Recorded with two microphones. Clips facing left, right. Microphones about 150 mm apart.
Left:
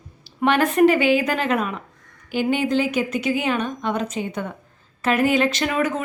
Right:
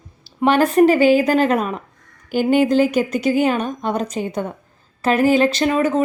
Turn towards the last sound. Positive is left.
turn(degrees=-30)  # may be behind; listen again after turning